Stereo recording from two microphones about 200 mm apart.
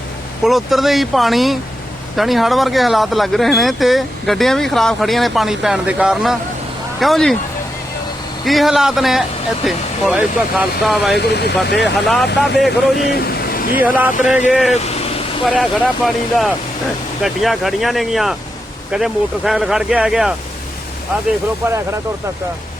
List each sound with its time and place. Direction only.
0.4 s speech: centre (ahead or behind)
8.4 s speech: centre (ahead or behind)
11.2 s speech: 55° left (ahead or behind)
11.8 s speech: centre (ahead or behind)
13.1 s a sound: 50° left (ahead or behind)
13.7 s speech: 10° right (ahead or behind)